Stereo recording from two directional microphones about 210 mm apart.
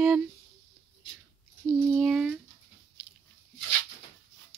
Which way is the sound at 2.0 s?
Centre (ahead or behind).